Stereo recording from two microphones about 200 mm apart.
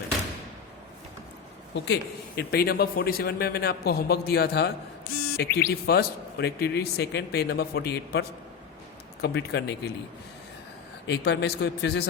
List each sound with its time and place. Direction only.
1.7 s a man's voice: 60° left (ahead or behind)
9.2 s speech: 55° left (ahead or behind)
11.0 s speech: 60° left (ahead or behind)